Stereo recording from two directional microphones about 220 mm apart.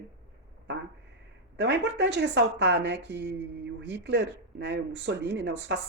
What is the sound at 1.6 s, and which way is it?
Speech, 50° right (ahead or behind).